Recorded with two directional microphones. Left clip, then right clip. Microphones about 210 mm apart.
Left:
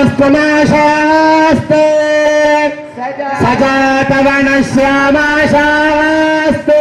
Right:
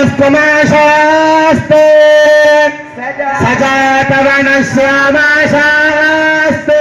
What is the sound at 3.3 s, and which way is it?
A man's voice, 20° right (ahead or behind).